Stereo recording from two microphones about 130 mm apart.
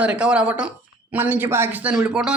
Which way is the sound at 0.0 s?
10° right (ahead or behind).